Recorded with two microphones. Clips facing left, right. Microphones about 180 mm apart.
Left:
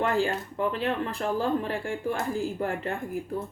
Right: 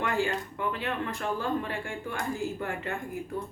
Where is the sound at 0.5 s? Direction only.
35° left (ahead or behind).